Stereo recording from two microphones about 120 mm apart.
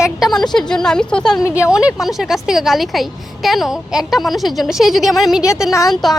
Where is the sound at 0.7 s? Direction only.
5° left (ahead or behind).